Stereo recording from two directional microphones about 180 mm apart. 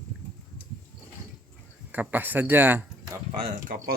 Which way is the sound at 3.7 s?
50° right (ahead or behind).